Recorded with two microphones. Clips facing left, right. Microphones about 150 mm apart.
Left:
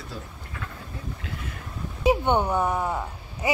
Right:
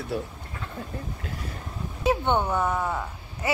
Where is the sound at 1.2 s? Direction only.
40° right (ahead or behind).